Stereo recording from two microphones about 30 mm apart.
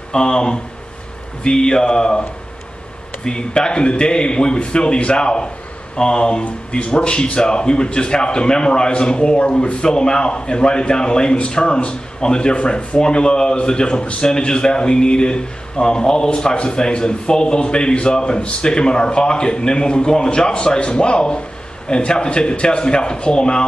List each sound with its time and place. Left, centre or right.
0.1 s a man's voice: left
3.3 s a man's voice: left